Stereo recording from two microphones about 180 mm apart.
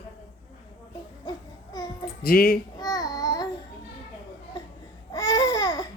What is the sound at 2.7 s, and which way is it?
Babbling, 20° left (ahead or behind).